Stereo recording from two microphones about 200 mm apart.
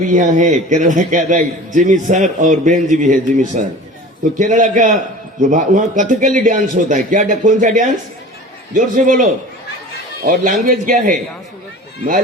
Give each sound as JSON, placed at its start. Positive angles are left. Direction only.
{"t": 0.0, "sound": "a man's voice", "side_deg": -40}
{"t": 10.2, "sound": "a man's voice", "side_deg": -40}